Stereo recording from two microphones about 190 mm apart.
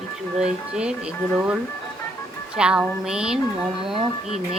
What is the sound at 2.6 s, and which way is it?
A woman's voice, 5° right (ahead or behind).